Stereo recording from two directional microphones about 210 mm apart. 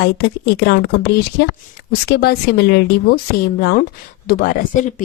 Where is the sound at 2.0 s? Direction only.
50° left (ahead or behind).